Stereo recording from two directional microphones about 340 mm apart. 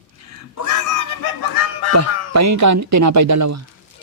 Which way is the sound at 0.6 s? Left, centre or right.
Left.